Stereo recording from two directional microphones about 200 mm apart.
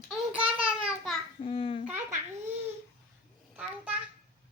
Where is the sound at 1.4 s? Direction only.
25° left (ahead or behind).